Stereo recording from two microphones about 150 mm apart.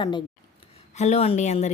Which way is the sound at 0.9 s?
45° left (ahead or behind).